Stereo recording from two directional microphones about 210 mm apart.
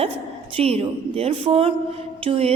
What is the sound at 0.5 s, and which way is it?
A woman's voice, 30° right (ahead or behind).